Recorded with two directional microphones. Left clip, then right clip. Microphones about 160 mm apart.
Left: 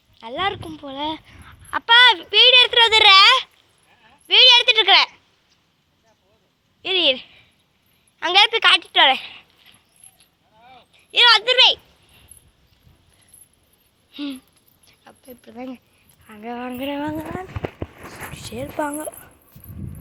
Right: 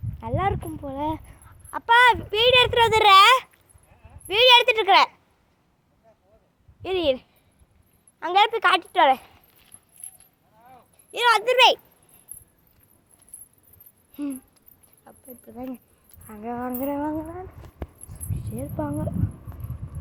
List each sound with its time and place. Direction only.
0.2 s speech: centre (ahead or behind)
6.8 s speech: centre (ahead or behind)
10.9 s speech: 5° right (ahead or behind)
15.3 s speech: 20° left (ahead or behind)
16.4 s music: 10° left (ahead or behind)
16.7 s speech: centre (ahead or behind)